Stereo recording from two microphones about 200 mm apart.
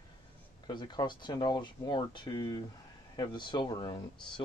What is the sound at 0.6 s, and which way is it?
Speech, 20° left (ahead or behind).